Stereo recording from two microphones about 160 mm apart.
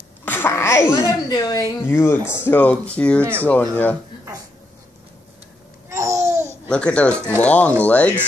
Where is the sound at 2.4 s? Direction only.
10° left (ahead or behind).